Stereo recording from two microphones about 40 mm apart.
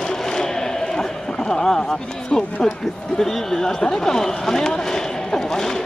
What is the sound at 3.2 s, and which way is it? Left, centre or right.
Speech, centre.